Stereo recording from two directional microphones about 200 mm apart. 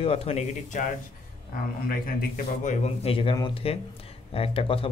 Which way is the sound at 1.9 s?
40° left (ahead or behind).